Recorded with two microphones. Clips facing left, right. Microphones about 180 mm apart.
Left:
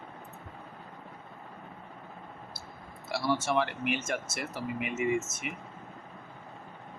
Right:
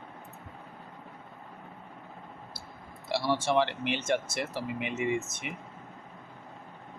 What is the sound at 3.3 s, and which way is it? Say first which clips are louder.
Speech: right 2 dB; 25° right (ahead or behind).